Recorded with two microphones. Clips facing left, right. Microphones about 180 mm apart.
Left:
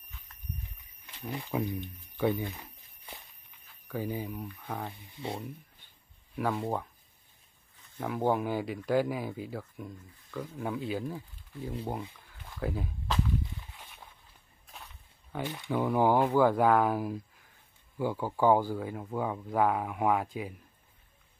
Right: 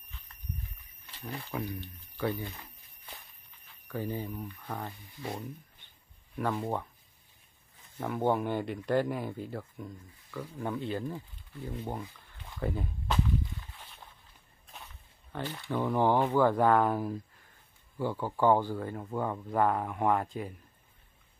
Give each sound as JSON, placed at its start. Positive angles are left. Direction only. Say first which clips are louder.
{"t": 1.3, "sound": "speech", "louder": "left 4 dB", "side_deg": 15}
{"t": 3.9, "sound": "speech", "louder": "left 1 dB", "side_deg": 10}
{"t": 5.1, "sound": "speech", "louder": "left 1 dB", "side_deg": 25}
{"t": 6.3, "sound": "speech", "louder": "left 1 dB", "side_deg": 5}
{"t": 8.0, "sound": "speech", "louder": "even", "side_deg": 10}
{"t": 12.3, "sound": "a sound", "louder": "right 1 dB", "side_deg": 0}
{"t": 15.3, "sound": "speech", "louder": "left 2 dB", "side_deg": 10}